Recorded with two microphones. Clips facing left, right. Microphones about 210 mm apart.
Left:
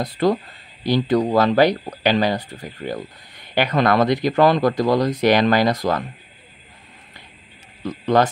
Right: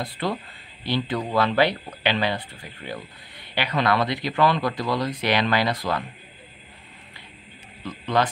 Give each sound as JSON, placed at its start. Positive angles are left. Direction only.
{"t": 0.0, "sound": "speech", "side_deg": 40}
{"t": 7.8, "sound": "speech", "side_deg": 40}